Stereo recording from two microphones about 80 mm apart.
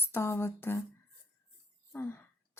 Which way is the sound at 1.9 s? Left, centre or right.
Left.